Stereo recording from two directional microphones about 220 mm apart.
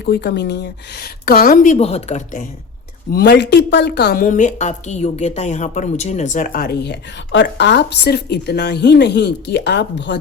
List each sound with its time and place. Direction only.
0.0 s a woman's voice: 50° left (ahead or behind); by 2.5 s 35° left (ahead or behind)
3.1 s a woman's voice: 45° left (ahead or behind)